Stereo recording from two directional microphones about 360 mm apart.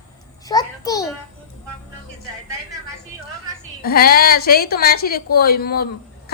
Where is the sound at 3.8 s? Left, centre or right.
Left.